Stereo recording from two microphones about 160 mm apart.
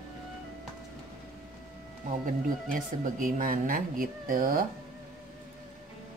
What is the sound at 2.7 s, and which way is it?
Speech, 55° right (ahead or behind).